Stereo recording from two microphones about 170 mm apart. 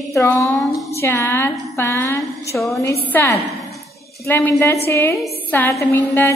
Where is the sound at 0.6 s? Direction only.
Centre (ahead or behind).